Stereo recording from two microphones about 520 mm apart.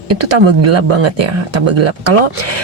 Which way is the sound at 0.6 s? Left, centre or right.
Right.